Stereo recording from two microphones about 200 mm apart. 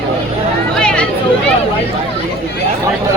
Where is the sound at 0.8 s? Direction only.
5° left (ahead or behind).